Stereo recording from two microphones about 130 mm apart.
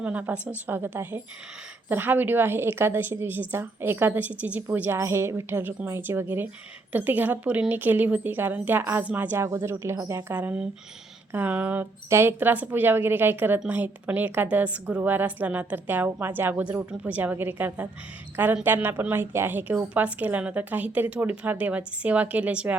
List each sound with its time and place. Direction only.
0.0 s a woman's voice: 10° right (ahead or behind)